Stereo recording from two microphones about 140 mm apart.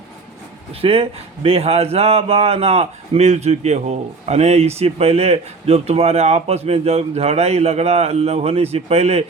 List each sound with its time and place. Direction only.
0.7 s a man's voice: 45° right (ahead or behind)